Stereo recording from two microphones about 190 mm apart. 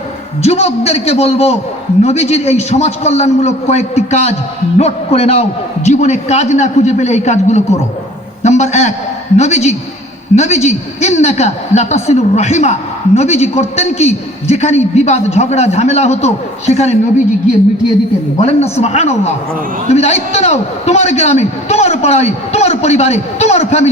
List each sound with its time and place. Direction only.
0.4 s a man's voice: 35° left (ahead or behind)
18.3 s a man's voice: 35° left (ahead or behind)